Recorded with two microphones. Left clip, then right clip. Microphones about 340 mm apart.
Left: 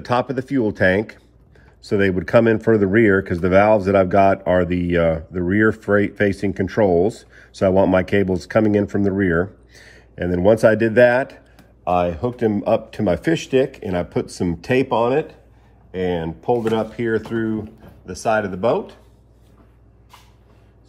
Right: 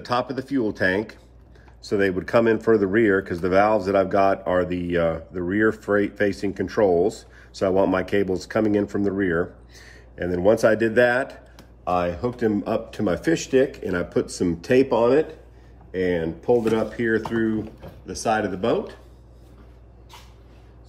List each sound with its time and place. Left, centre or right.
0.0 s speech: centre